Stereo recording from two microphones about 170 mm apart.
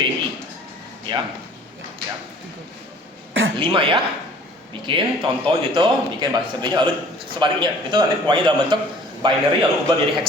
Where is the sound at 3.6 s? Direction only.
30° right (ahead or behind).